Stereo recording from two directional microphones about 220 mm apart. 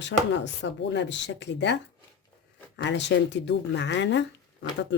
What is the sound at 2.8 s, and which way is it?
Speech, 55° left (ahead or behind).